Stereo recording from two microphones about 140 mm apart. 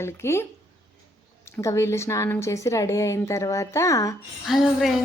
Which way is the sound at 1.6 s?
20° left (ahead or behind).